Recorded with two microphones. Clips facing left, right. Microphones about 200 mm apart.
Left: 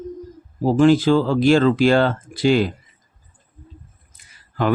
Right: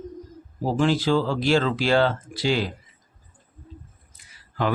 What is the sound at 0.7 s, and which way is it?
Speech, 50° left (ahead or behind).